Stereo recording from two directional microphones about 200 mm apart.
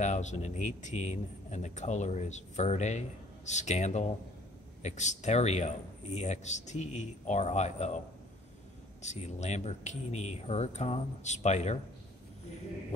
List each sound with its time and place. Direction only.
0.0 s speech: 35° left (ahead or behind)
9.0 s speech: 35° left (ahead or behind)